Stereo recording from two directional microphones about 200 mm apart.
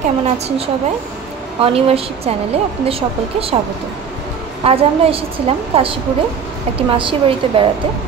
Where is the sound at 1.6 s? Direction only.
30° right (ahead or behind).